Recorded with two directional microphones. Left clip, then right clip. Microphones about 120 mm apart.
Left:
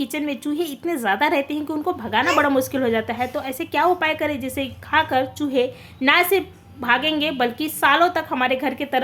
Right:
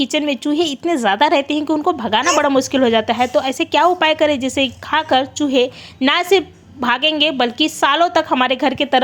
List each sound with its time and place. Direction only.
0.0 s a woman's voice: 35° right (ahead or behind)